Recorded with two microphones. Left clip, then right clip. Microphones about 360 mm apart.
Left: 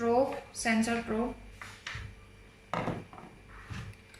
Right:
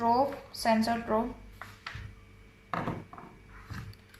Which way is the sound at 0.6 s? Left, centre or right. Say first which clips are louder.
Right 4 dB; centre.